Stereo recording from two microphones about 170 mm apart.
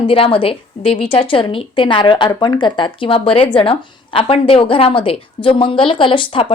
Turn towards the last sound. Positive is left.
turn(degrees=30)  # may be behind; listen again after turning